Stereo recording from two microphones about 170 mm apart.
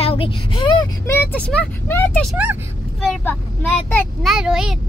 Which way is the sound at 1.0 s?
15° left (ahead or behind).